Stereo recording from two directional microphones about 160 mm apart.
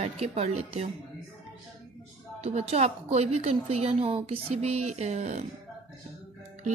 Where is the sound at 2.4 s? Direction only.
40° right (ahead or behind).